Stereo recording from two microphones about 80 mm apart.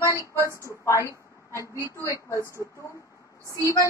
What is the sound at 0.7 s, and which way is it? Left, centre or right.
A woman's voice, left.